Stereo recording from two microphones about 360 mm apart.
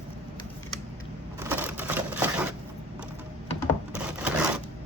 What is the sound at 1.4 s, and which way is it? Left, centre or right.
Crushing, centre.